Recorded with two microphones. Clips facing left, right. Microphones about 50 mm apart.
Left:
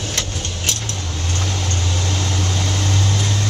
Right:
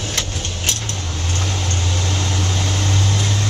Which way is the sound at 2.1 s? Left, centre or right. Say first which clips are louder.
Even; centre.